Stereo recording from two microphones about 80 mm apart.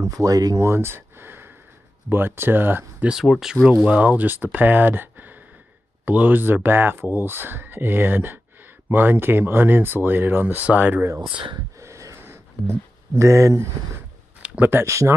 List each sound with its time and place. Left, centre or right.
0.0 s speech: right
0.6 s a sound: right
2.0 s speech: right
3.1 s speech: centre
3.6 s speech: centre
11.3 s speech: right
11.8 s a sound: right
14.4 s speech: right